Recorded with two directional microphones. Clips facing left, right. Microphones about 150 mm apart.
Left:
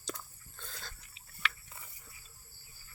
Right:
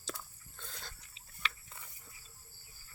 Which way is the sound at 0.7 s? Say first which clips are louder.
Left 1 dB; 20° right (ahead or behind).